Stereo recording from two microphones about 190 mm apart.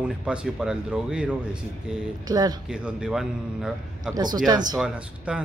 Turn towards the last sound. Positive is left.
turn(degrees=-5)  # may be behind; listen again after turning